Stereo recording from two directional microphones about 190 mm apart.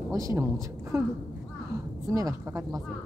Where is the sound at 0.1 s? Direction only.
15° right (ahead or behind).